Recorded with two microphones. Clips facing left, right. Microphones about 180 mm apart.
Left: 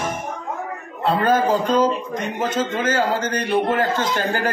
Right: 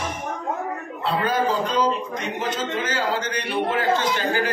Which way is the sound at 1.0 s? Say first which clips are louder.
Left 5 dB; 45° left (ahead or behind).